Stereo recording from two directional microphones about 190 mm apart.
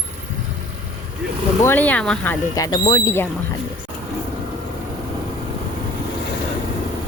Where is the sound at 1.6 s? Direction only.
10° left (ahead or behind).